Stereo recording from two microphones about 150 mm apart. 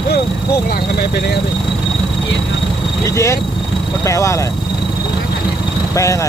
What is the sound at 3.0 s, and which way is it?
Speech, 20° left (ahead or behind).